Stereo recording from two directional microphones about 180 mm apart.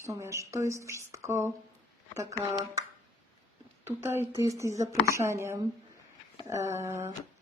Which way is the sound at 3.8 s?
15° right (ahead or behind).